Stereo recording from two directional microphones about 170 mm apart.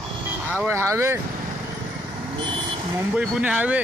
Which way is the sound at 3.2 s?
5° right (ahead or behind).